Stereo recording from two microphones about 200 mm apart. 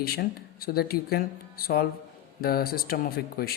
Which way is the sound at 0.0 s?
50° left (ahead or behind).